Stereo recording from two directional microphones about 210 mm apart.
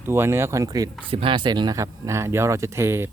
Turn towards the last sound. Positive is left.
turn(degrees=-10)  # may be behind; listen again after turning